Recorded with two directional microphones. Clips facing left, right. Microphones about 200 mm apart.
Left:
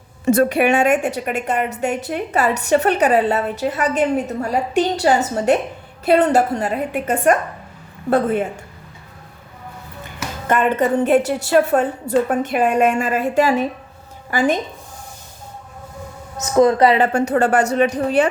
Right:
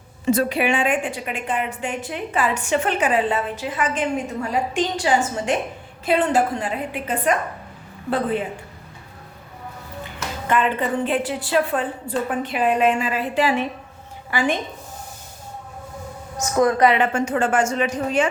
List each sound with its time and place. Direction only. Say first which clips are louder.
0.3 s a woman's voice: left 5 dB; 50° left (ahead or behind)
10.4 s a woman's voice: left 4 dB; 50° left (ahead or behind)
16.6 s speech: left 4 dB; 30° left (ahead or behind)